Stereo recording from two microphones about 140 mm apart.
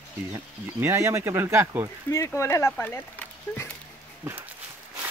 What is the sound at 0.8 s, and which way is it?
Speech, 20° right (ahead or behind).